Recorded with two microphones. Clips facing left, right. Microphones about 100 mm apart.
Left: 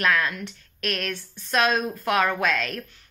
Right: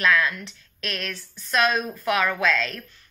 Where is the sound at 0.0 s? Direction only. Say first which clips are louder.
Right 1 dB; 45° left (ahead or behind).